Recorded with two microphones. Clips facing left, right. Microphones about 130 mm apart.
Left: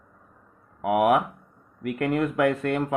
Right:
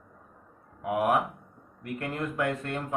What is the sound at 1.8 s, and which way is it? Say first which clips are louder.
Speech: left 8 dB; 80° left.